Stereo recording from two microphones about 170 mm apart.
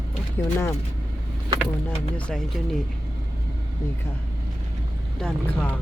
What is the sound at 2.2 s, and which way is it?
Speech, 5° left (ahead or behind).